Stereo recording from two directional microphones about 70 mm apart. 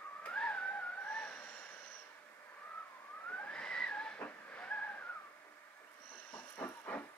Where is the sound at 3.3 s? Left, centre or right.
Centre.